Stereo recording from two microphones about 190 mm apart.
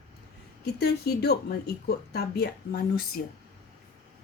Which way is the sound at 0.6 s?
60° left (ahead or behind).